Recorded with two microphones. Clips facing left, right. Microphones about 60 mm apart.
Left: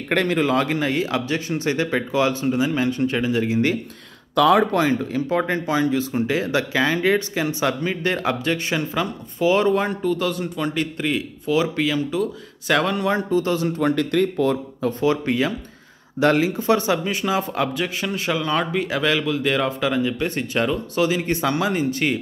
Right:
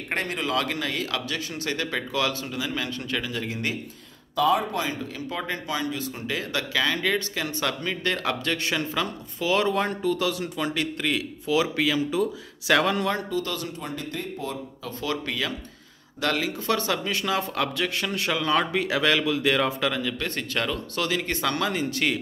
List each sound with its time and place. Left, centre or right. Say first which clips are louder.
0.1 s speech: left 8 dB; left
0.4 s speech: left 7 dB; left
4.4 s speech: left 6 dB; left
4.7 s speech: left 9 dB; left; by 9.8 s centre
9.8 s speech: left 3 dB; centre
13.3 s speech: left 9 dB; left
13.7 s speech: left 14 dB; left
14.8 s speech: left 8 dB; left
16.5 s speech: left 6 dB; centre
20.0 s speech: left 6 dB; centre